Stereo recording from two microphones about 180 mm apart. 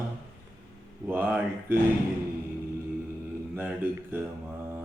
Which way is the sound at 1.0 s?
10° right (ahead or behind).